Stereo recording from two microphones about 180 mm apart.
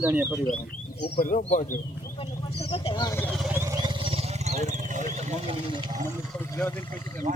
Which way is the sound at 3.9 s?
30° right (ahead or behind).